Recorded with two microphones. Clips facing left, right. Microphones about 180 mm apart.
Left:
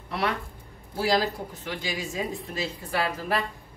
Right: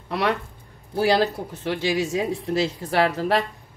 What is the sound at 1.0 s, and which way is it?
Speech, 80° right.